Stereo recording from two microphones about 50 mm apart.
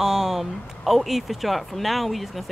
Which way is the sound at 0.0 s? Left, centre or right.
Centre.